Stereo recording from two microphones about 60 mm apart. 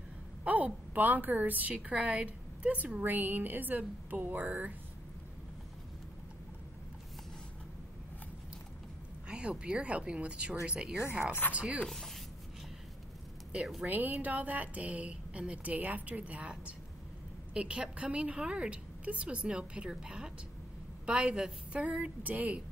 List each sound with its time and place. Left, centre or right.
0.4 s a sound: right
0.9 s a woman's voice: right
9.3 s a woman's voice: centre
11.8 s speech: centre
13.8 s a woman's voice: right